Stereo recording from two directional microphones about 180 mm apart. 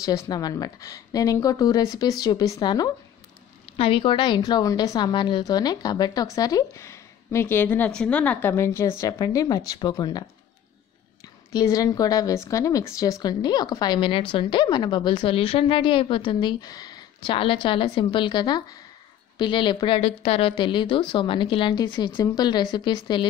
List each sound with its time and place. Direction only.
0.0 s a woman's voice: 20° left (ahead or behind)
11.5 s a woman's voice: 20° left (ahead or behind)